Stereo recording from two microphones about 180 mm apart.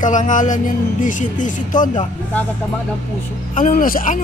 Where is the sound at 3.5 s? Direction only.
45° left (ahead or behind).